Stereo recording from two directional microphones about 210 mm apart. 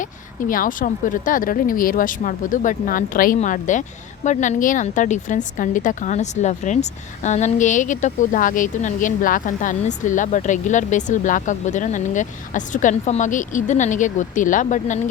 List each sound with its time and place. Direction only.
0.0 s a woman's voice: 40° left (ahead or behind)